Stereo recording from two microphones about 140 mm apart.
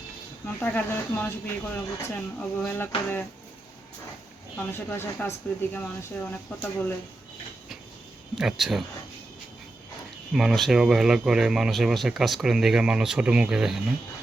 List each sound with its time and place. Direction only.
0.4 s speech: 10° left (ahead or behind)
4.5 s speech: 15° left (ahead or behind)
8.4 s speech: centre (ahead or behind)
10.3 s speech: centre (ahead or behind)